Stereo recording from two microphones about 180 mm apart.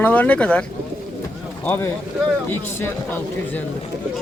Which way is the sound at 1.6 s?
10° left (ahead or behind).